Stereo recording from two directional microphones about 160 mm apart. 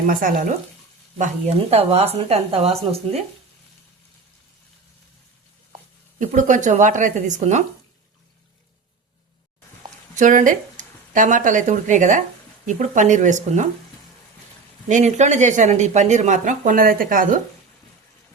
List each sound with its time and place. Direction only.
0.1 s speech: 60° right (ahead or behind)
1.2 s speech: 40° right (ahead or behind)
6.1 s speech: 50° right (ahead or behind)
10.2 s speech: 55° right (ahead or behind)
14.8 s speech: 50° right (ahead or behind)